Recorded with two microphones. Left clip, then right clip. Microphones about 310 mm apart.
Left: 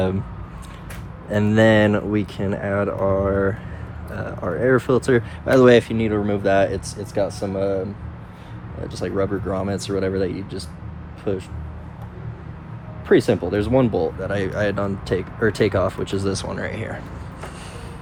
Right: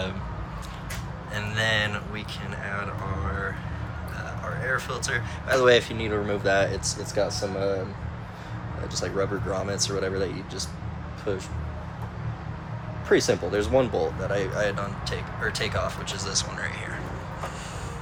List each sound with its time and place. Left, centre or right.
1.3 s speech: centre
9.0 s speech: left
13.1 s speech: left